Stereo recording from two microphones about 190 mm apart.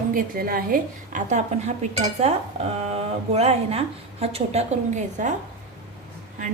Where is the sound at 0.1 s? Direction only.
50° right (ahead or behind).